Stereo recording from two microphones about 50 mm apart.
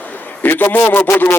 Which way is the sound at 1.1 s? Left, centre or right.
Left.